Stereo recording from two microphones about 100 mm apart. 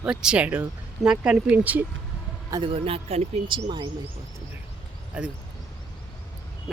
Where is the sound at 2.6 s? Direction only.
70° right (ahead or behind).